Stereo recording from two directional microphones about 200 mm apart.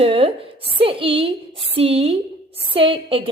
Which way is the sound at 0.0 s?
25° right (ahead or behind).